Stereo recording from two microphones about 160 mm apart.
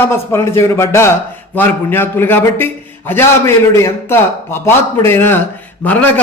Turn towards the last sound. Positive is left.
turn(degrees=10)  # may be behind; listen again after turning